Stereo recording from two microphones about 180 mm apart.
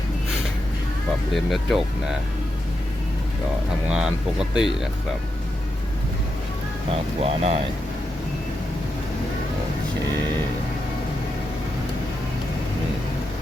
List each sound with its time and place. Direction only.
1.3 s speech: centre (ahead or behind)
3.9 s speech: 5° right (ahead or behind)
7.2 s speech: 35° right (ahead or behind)